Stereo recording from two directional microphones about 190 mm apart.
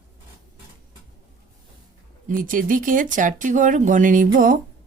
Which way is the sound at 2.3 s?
45° right (ahead or behind).